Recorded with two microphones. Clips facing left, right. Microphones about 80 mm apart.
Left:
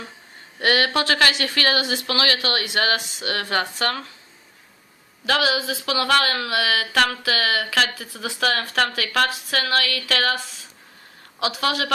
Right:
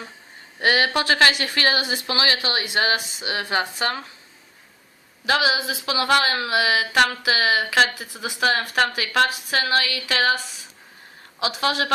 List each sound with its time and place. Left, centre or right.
0.6 s a woman's voice: right
5.2 s a woman's voice: centre